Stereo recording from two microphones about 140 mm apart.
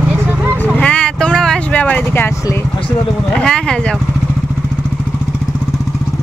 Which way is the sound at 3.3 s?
5° left (ahead or behind).